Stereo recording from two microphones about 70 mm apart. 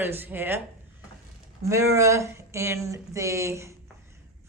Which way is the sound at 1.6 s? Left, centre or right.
Right.